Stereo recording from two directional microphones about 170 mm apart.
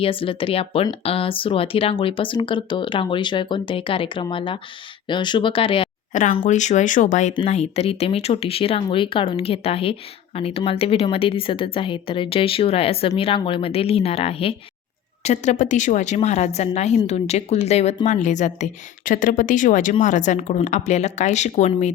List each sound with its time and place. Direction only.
0.0 s speech: 30° left (ahead or behind)
6.4 s a woman's voice: 45° left (ahead or behind)